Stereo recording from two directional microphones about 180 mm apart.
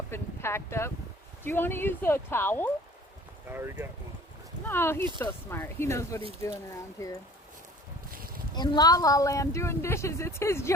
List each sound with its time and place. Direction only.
0.1 s speech: 15° left (ahead or behind)
3.5 s speech: 10° right (ahead or behind)
4.6 s speech: 10° left (ahead or behind)
8.1 s a sound: 55° right (ahead or behind)
8.5 s speech: 25° left (ahead or behind)